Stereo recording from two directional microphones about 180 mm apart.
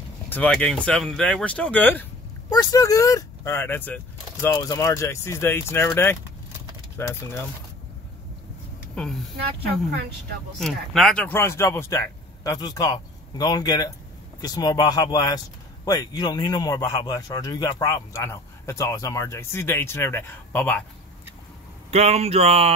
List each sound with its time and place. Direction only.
0.3 s speech: 10° left (ahead or behind)
2.5 s speech: 20° left (ahead or behind)
8.9 s speech: centre (ahead or behind)
10.6 s speech: centre (ahead or behind)
21.9 s speech: 35° right (ahead or behind)